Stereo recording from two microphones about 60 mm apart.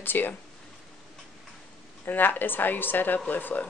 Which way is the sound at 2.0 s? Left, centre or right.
Left.